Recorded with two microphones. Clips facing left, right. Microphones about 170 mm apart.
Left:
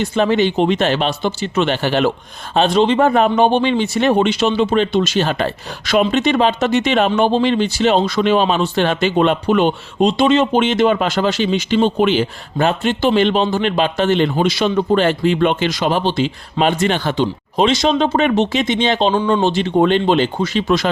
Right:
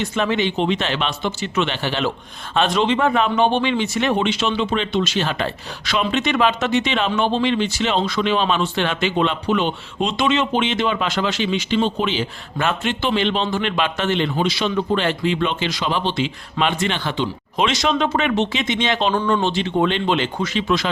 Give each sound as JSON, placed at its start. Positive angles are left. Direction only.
{"t": 0.0, "sound": "speech", "side_deg": 35}
{"t": 2.6, "sound": "speech", "side_deg": 35}
{"t": 10.1, "sound": "speech", "side_deg": 35}
{"t": 12.5, "sound": "speech", "side_deg": 35}